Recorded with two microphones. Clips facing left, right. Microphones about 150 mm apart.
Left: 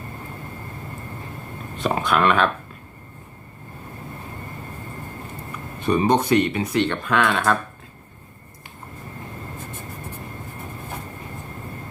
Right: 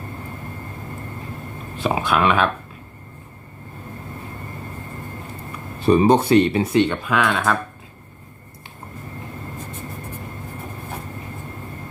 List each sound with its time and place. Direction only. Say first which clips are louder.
1.8 s speech: right 1 dB; 5° right (ahead or behind)
5.8 s speech: right 4 dB; 30° right (ahead or behind)
6.7 s speech: right 1 dB; 10° right (ahead or behind)